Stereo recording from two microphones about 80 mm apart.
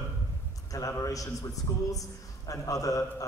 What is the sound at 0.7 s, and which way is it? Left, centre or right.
A man's voice, left.